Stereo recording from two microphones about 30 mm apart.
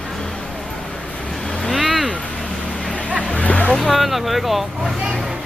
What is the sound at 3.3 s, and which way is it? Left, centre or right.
Music, left.